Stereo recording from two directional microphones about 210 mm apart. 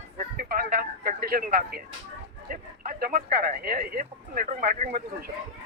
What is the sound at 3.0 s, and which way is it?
Speech, 40° right (ahead or behind).